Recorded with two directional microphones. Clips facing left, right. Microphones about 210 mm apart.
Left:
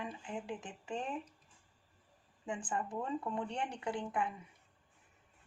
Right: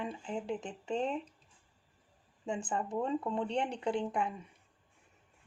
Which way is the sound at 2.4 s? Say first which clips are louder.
Right 3 dB; 25° right (ahead or behind).